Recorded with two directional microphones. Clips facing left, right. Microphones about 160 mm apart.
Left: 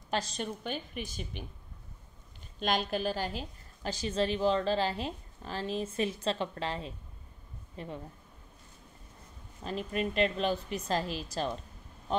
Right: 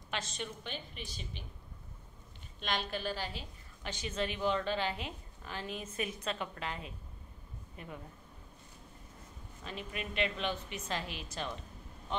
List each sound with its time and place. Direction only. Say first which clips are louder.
0.1 s a woman's voice: left 6 dB; 35° left (ahead or behind)
2.6 s a woman's voice: left 6 dB; 45° left (ahead or behind)
9.6 s a woman's voice: left 9 dB; 40° left (ahead or behind)